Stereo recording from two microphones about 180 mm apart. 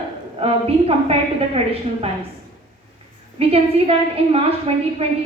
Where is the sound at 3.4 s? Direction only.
35° right (ahead or behind).